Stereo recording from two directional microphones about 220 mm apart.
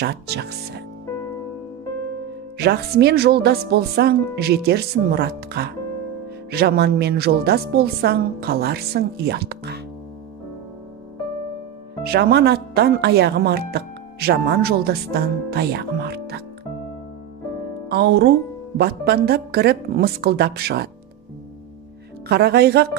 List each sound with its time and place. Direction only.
0.0 s speech: 50° right (ahead or behind)
2.5 s speech: 45° right (ahead or behind)
12.0 s speech: 45° right (ahead or behind)
17.8 s speech: 45° right (ahead or behind)
22.3 s speech: 45° right (ahead or behind)